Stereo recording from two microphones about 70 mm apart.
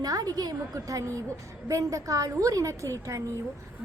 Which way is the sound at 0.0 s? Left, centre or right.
Right.